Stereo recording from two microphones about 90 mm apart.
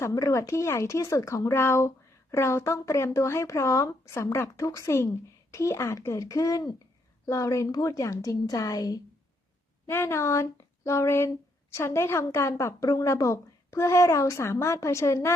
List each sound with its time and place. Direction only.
0.0 s speech: 35° left (ahead or behind)
9.9 s speech: 30° left (ahead or behind)